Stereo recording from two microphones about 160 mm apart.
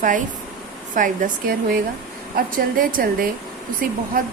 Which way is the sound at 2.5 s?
60° right (ahead or behind).